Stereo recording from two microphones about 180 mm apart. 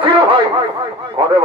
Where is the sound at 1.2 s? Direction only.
30° right (ahead or behind).